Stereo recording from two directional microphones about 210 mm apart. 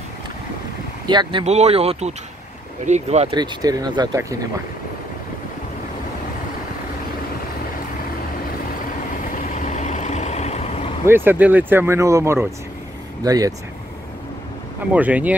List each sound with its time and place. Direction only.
1.0 s speech: 20° right (ahead or behind)
3.3 s speech: 20° right (ahead or behind)
9.3 s vehicle: 35° left (ahead or behind)
11.1 s speech: 10° right (ahead or behind)
14.9 s speech: 5° right (ahead or behind)